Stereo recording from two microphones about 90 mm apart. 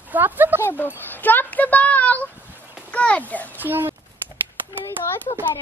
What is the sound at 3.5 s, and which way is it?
Speech, 20° right (ahead or behind).